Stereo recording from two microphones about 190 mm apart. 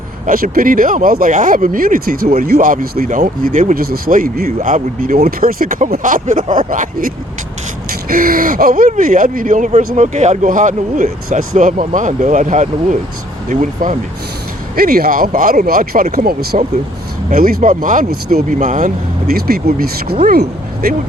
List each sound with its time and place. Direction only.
0.3 s speech: 50° right (ahead or behind)
19.3 s speech: 55° right (ahead or behind)